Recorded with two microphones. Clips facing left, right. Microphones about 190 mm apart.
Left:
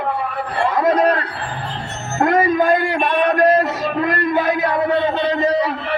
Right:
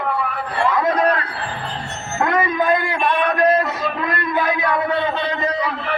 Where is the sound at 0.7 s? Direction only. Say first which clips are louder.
Left 4 dB; 35° left (ahead or behind).